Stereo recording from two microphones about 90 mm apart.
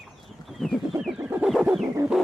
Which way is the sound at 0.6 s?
5° left (ahead or behind).